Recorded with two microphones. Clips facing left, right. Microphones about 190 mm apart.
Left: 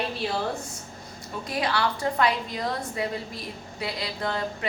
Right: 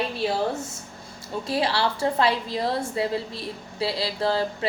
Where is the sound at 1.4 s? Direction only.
30° right (ahead or behind).